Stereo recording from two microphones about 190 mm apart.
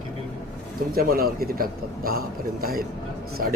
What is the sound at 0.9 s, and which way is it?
A man's voice, 50° right (ahead or behind).